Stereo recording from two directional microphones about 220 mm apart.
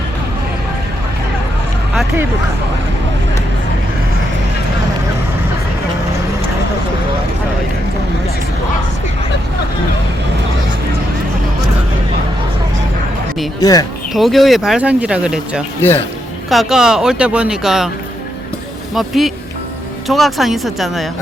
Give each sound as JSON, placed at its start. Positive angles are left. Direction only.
{"t": 13.6, "sound": "speech", "side_deg": 15}
{"t": 14.1, "sound": "speech", "side_deg": 0}
{"t": 18.9, "sound": "speech", "side_deg": 0}